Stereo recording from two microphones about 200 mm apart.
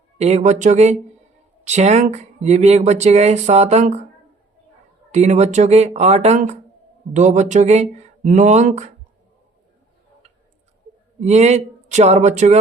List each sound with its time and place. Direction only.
0.2 s speech: 35° right (ahead or behind)
5.1 s speech: 35° right (ahead or behind)
11.2 s speech: 35° right (ahead or behind)